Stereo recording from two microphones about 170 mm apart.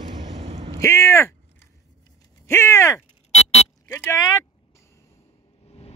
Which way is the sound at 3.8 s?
15° left (ahead or behind).